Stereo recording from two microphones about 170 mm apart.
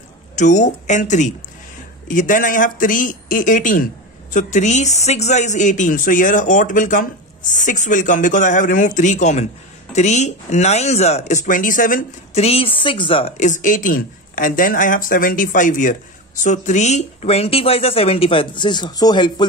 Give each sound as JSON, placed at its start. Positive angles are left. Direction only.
{"t": 0.4, "sound": "speech", "side_deg": 45}
{"t": 12.4, "sound": "speech", "side_deg": 35}
{"t": 13.4, "sound": "speech", "side_deg": 50}